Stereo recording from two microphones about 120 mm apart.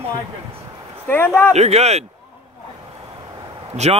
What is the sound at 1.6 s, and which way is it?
Speech, 65° right (ahead or behind).